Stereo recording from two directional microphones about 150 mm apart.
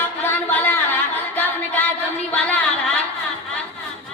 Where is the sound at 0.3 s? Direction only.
15° left (ahead or behind).